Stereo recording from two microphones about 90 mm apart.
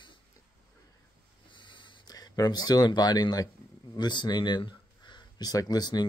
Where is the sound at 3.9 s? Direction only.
55° left (ahead or behind).